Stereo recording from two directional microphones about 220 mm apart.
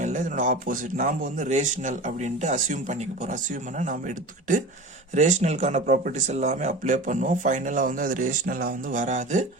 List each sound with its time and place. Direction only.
0.0 s speech: 35° right (ahead or behind)